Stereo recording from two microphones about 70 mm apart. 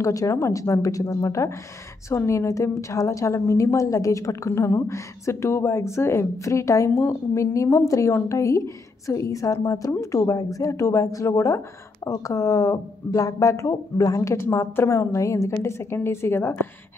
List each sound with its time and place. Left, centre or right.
0.0 s speech: left
4.5 s speech: left
14.3 s a woman's voice: left